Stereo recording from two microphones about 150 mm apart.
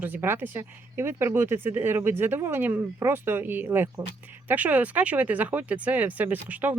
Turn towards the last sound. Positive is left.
turn(degrees=-10)  # may be behind; listen again after turning